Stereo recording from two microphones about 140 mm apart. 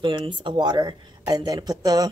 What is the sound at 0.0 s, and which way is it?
Speech, 40° right (ahead or behind).